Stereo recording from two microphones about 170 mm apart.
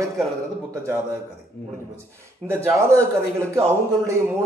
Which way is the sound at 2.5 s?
15° right (ahead or behind).